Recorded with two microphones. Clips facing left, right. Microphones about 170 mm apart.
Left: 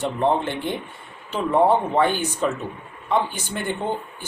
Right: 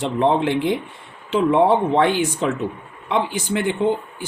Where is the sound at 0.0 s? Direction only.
90° right.